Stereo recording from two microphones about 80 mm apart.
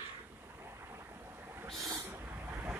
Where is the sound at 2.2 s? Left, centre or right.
Right.